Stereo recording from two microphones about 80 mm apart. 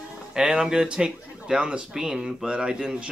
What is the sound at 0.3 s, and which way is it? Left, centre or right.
Speech, centre.